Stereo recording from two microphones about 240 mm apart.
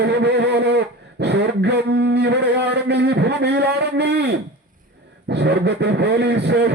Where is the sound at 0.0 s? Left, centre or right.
Right.